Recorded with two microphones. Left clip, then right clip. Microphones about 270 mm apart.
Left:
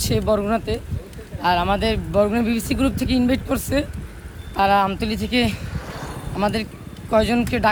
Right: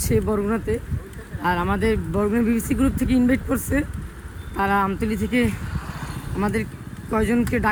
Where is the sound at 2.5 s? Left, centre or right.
Centre.